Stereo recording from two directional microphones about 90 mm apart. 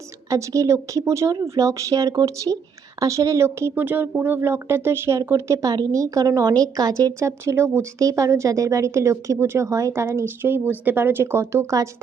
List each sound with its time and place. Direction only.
0.3 s a woman's voice: 35° right (ahead or behind)
7.2 s a woman's voice: 30° right (ahead or behind)